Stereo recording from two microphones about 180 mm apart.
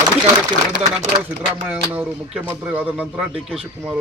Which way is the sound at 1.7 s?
5° right (ahead or behind).